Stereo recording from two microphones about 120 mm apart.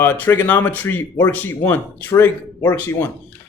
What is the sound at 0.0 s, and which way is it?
Speech, 20° left (ahead or behind).